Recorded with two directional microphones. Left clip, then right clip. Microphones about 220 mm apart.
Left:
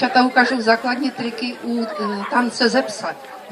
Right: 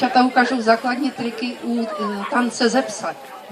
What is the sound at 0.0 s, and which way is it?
A woman's voice, 25° left (ahead or behind).